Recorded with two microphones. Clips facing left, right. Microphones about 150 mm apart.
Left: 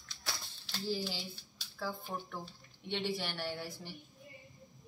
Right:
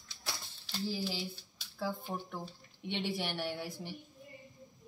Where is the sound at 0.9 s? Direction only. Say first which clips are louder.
Left 1 dB; 10° right (ahead or behind).